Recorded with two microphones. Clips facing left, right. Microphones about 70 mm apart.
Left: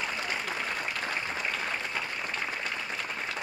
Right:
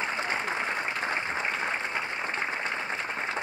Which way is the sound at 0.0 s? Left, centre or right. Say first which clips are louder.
Right 3 dB; right.